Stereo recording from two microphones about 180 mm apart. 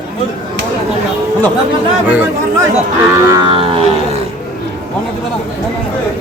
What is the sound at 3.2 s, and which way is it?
Music, 30° right (ahead or behind).